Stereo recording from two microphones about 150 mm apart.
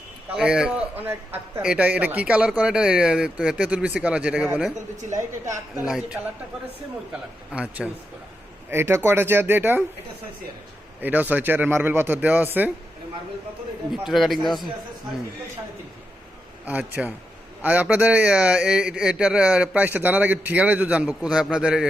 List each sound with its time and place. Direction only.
0.3 s a man's voice: 5° right (ahead or behind)
11.0 s a man's voice: 10° right (ahead or behind)
14.1 s speech: centre (ahead or behind)
16.6 s a man's voice: 10° right (ahead or behind)